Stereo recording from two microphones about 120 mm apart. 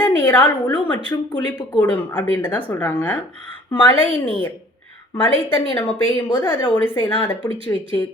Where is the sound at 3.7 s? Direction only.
45° left (ahead or behind).